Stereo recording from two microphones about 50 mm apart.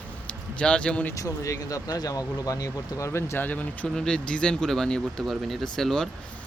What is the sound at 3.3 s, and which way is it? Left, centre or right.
Speech, left.